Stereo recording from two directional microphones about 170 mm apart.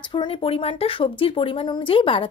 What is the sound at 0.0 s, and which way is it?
Speech, 30° left (ahead or behind).